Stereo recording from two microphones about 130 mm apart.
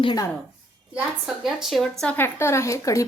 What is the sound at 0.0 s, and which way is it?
Speech, 35° left (ahead or behind).